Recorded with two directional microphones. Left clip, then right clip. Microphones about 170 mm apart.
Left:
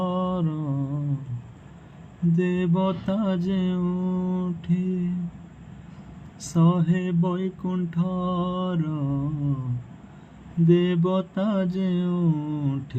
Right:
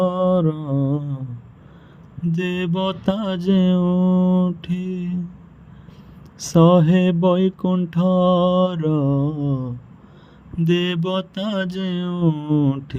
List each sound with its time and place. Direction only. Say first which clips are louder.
0.0 s mantra: right 9 dB; 30° right (ahead or behind)
2.3 s mantra: right 2 dB; 50° right (ahead or behind)
6.4 s mantra: right 11 dB; 55° right (ahead or behind)
10.7 s mantra: right 1 dB; 55° right (ahead or behind)